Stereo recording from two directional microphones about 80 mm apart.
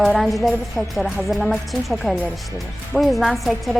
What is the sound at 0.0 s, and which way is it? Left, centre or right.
A woman's voice, centre.